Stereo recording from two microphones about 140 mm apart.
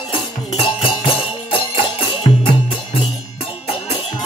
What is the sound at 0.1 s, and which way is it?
Music, 45° left (ahead or behind).